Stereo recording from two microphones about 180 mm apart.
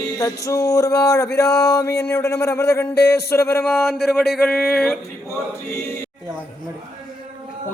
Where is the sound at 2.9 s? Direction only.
65° left (ahead or behind).